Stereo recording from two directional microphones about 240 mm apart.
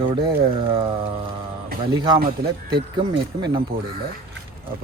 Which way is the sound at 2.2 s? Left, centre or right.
Right.